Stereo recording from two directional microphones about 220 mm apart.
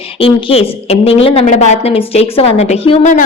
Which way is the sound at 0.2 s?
25° left (ahead or behind).